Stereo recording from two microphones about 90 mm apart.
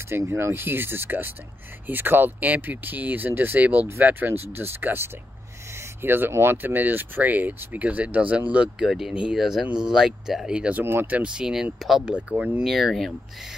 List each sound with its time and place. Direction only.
0.3 s speech: 25° right (ahead or behind)
8.8 s speech: 5° right (ahead or behind)
12.6 s speech: centre (ahead or behind)